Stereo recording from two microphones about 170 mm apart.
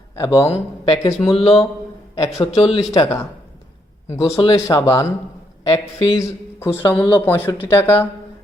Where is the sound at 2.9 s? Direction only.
20° left (ahead or behind).